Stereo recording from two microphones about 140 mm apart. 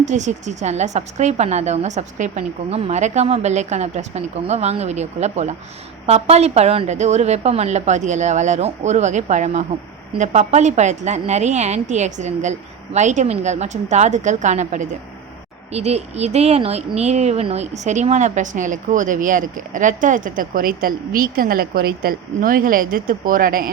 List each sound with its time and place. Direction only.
0.0 s a woman's voice: 55° right (ahead or behind); by 23.6 s 85° right